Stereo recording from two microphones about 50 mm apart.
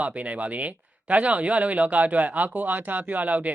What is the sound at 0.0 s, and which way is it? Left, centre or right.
Speech, right.